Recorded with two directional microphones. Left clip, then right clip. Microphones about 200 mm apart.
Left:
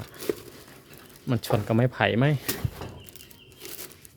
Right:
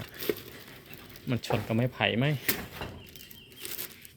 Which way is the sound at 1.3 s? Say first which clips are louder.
Left 5 dB; 35° left (ahead or behind).